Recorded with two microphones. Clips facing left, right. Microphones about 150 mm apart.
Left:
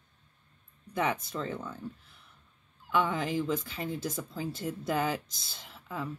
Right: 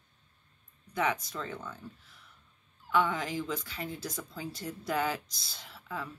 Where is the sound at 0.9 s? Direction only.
30° left (ahead or behind).